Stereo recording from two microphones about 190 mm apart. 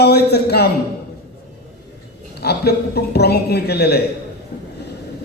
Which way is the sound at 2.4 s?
55° left (ahead or behind).